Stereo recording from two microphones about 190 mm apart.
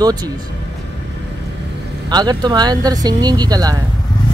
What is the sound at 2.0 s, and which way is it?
Speech, 20° right (ahead or behind).